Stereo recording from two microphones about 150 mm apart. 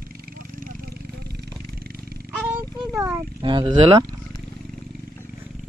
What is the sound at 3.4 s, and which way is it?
Speech, 30° right (ahead or behind).